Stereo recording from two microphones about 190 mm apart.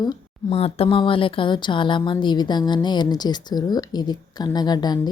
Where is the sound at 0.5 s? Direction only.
30° left (ahead or behind).